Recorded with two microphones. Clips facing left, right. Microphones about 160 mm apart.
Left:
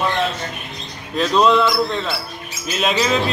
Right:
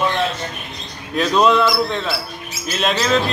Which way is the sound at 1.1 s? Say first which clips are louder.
Even; centre (ahead or behind).